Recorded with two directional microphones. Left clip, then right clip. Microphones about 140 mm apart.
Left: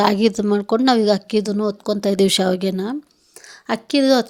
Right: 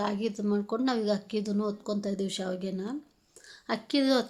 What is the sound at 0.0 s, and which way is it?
A woman's voice, 90° left.